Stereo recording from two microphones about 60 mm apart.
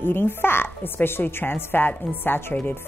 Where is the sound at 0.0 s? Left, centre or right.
Left.